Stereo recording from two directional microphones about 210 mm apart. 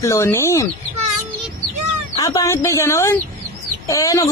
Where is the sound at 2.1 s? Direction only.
15° left (ahead or behind).